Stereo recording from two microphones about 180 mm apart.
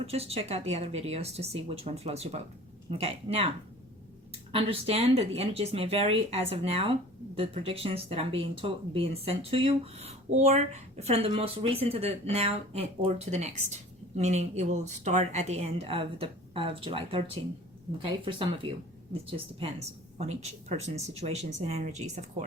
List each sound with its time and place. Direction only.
0.0 s speech: 35° right (ahead or behind)
4.5 s speech: 35° right (ahead or behind)